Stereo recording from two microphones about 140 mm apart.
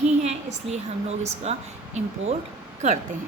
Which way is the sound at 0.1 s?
50° right (ahead or behind).